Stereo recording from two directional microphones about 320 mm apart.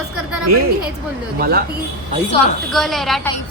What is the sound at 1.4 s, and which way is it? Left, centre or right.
Speech, right.